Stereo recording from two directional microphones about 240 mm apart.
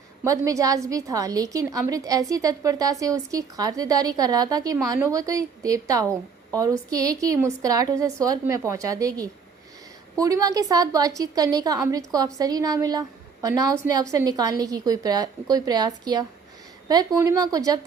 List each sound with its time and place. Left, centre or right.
0.3 s a woman's voice: centre
16.9 s a woman's voice: centre